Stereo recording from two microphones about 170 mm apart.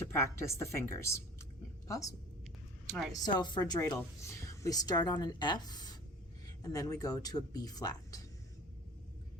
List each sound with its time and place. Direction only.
0.1 s a woman's voice: 15° left (ahead or behind)